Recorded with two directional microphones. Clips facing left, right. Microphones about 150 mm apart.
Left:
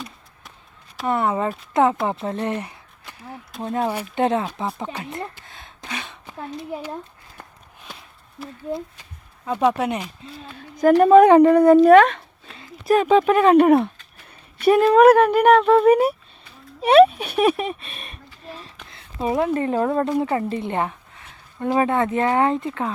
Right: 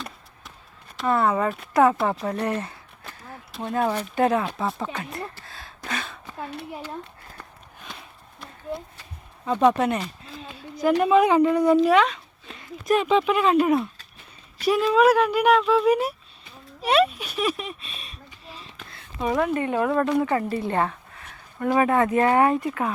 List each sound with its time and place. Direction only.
1.0 s speech: 20° left (ahead or behind)
3.8 s speech: 10° left (ahead or behind)
4.1 s speech: 25° left (ahead or behind)
9.5 s speech: 10° left (ahead or behind)
10.8 s a woman's voice: 50° left (ahead or behind)
12.5 s speech: 35° left (ahead or behind); by 18.2 s 60° left (ahead or behind)
18.9 s a woman's voice: 25° left (ahead or behind)